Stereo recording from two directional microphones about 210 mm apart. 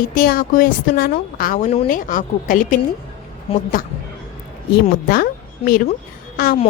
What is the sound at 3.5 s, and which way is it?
Speech, 25° left (ahead or behind).